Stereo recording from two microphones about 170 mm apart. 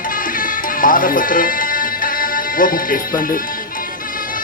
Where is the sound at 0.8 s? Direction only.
55° left (ahead or behind).